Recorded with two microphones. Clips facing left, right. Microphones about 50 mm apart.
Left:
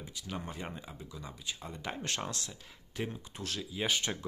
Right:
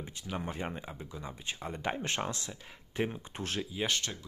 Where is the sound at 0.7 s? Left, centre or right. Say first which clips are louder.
Right 3 dB; right.